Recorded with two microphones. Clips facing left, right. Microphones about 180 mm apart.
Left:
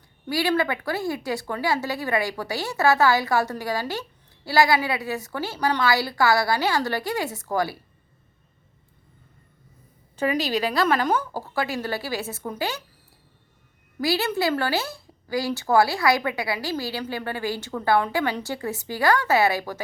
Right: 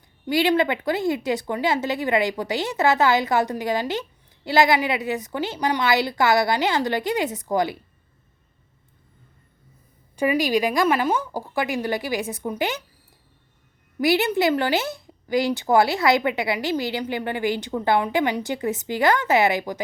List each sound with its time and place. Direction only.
0.3 s a woman's voice: 20° right (ahead or behind)
10.2 s a woman's voice: 15° right (ahead or behind)
14.0 s a woman's voice: 20° right (ahead or behind)